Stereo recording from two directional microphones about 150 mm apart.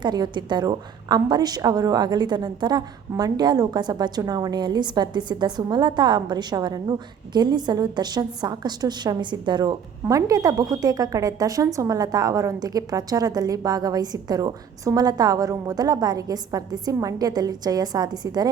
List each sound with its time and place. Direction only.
0.0 s a woman's voice: 30° right (ahead or behind)